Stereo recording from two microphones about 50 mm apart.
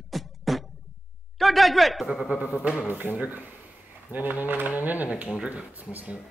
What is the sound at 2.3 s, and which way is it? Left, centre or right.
Speech, right.